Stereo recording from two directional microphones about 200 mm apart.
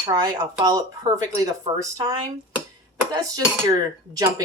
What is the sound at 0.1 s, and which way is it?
Speech, 20° right (ahead or behind).